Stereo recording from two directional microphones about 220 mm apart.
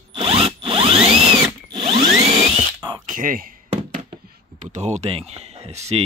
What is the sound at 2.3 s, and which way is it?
Drill, 30° right (ahead or behind).